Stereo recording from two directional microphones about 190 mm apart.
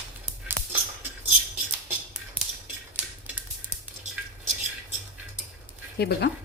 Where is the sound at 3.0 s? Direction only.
5° right (ahead or behind).